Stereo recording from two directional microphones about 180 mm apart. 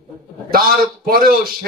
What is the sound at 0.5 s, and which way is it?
Speech, 55° right (ahead or behind).